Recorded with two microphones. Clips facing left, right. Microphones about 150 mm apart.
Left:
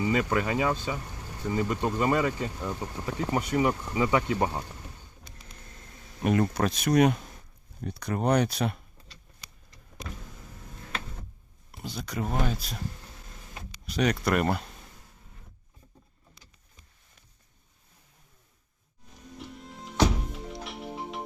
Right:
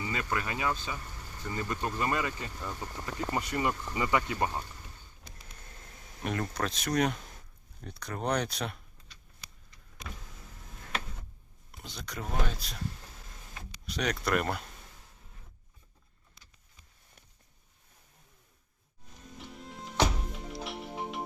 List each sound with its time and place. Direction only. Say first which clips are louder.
0.0 s speech: left 8 dB; 20° left (ahead or behind)
6.5 s speech: left 7 dB; 10° left (ahead or behind)
11.8 s speech: left 8 dB; 5° left (ahead or behind)
13.8 s speech: left 6 dB; 5° left (ahead or behind)
19.4 s music: left 1 dB; centre (ahead or behind)